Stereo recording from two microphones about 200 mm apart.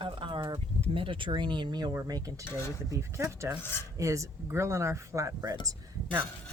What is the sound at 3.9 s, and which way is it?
Speech, 15° right (ahead or behind).